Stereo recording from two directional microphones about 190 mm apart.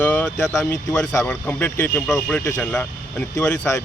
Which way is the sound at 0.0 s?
10° left (ahead or behind).